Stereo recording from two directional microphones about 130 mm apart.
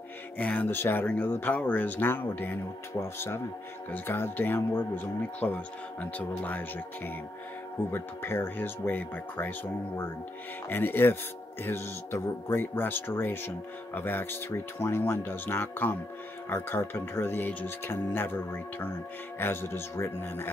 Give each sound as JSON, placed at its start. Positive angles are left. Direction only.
{"t": 0.4, "sound": "speech", "side_deg": 10}
{"t": 7.9, "sound": "speech", "side_deg": 15}